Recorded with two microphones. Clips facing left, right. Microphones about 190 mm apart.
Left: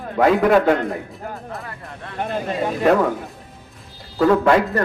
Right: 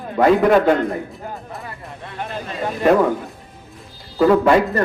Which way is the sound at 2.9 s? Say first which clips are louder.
Right 2 dB; centre (ahead or behind).